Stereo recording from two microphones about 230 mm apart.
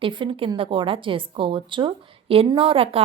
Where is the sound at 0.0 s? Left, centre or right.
Right.